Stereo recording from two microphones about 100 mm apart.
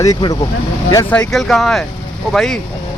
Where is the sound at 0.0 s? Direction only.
40° left (ahead or behind).